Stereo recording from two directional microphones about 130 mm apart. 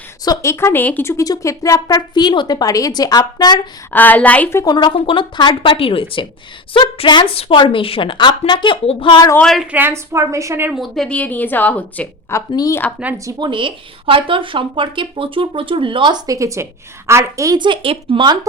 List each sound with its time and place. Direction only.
0.3 s a woman's voice: 20° left (ahead or behind)
3.9 s a woman's voice: 15° left (ahead or behind)
4.7 s a woman's voice: 40° left (ahead or behind)
9.4 s a woman's voice: 5° left (ahead or behind)
9.7 s a woman's voice: 20° right (ahead or behind)
10.8 s a woman's voice: centre (ahead or behind)
12.5 s a woman's voice: 25° left (ahead or behind)
13.2 s a woman's voice: 35° right (ahead or behind)